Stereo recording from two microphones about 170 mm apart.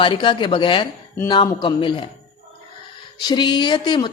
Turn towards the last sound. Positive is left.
turn(degrees=25)  # may be behind; listen again after turning